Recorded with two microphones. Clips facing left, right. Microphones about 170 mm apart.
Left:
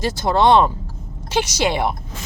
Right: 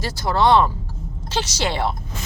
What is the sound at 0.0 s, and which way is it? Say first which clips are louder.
A woman's voice: left 3 dB; 20° left (ahead or behind).